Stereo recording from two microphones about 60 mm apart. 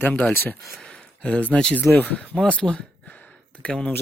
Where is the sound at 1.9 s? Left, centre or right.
Left.